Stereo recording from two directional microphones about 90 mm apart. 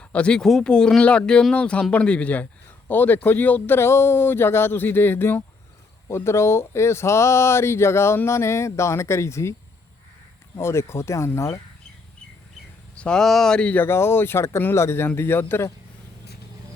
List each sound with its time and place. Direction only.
0.0 s speech: 15° left (ahead or behind); by 9.6 s 30° left (ahead or behind)
10.6 s speech: 30° left (ahead or behind)
13.0 s speech: 5° left (ahead or behind); by 15.7 s 25° left (ahead or behind)